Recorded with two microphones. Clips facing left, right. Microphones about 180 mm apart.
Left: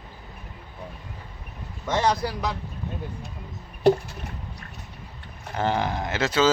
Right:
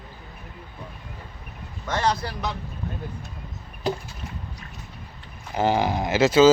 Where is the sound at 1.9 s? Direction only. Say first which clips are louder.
Left 1 dB; 20° left (ahead or behind).